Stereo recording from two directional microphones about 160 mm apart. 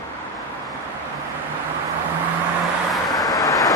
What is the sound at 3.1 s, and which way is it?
Vehicle, 25° left (ahead or behind).